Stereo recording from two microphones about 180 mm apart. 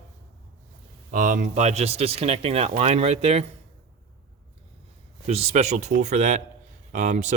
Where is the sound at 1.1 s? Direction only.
45° right (ahead or behind).